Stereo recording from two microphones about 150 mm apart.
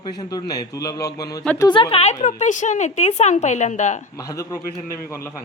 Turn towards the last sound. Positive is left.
turn(degrees=20)  # may be behind; listen again after turning